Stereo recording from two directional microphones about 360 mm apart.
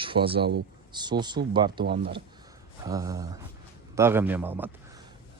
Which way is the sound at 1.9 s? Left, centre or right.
Right.